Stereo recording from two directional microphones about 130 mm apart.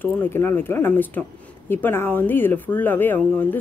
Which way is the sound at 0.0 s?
15° left (ahead or behind).